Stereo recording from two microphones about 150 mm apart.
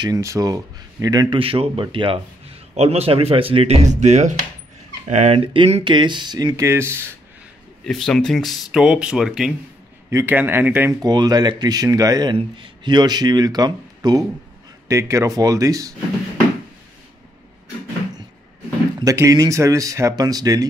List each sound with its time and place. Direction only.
0.0 s speech: 20° right (ahead or behind); by 5.4 s 50° right (ahead or behind)
5.4 s speech: 35° right (ahead or behind); by 7.2 s 15° right (ahead or behind)
7.8 s speech: 5° left (ahead or behind)
10.0 s speech: 15° right (ahead or behind)
11.0 s speech: 25° right (ahead or behind)
18.9 s speech: 20° right (ahead or behind)